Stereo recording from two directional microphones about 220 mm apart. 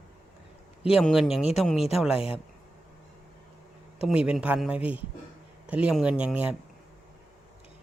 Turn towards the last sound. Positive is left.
turn(degrees=-5)  # may be behind; listen again after turning